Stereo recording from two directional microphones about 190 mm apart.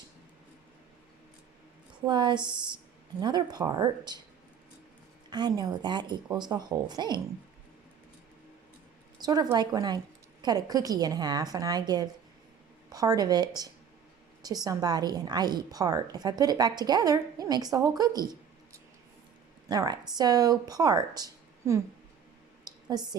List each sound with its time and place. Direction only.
2.0 s a woman's voice: 25° right (ahead or behind)
5.3 s a woman's voice: 20° right (ahead or behind)
9.1 s a woman's voice: 20° right (ahead or behind)
22.6 s a sound: 20° right (ahead or behind)